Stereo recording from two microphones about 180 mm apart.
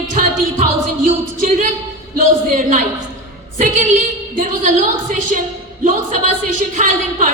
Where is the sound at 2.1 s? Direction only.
50° right (ahead or behind).